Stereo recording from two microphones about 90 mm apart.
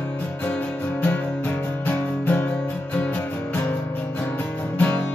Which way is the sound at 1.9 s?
20° left (ahead or behind).